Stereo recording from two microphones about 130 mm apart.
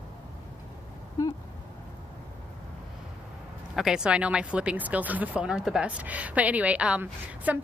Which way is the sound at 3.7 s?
5° right (ahead or behind).